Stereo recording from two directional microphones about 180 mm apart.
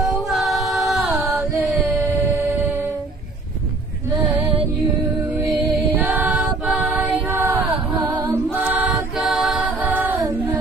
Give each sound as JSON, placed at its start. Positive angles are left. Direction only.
{"t": 0.0, "sound": "mantra", "side_deg": 0}
{"t": 2.2, "sound": "a sound", "side_deg": -15}
{"t": 5.7, "sound": "mantra", "side_deg": -10}
{"t": 8.5, "sound": "music", "side_deg": -5}